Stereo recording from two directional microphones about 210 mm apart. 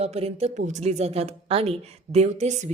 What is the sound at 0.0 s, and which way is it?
A woman's voice, 30° right (ahead or behind).